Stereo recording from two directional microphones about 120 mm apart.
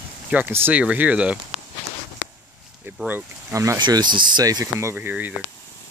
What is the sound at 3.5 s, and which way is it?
Speech, 25° right (ahead or behind).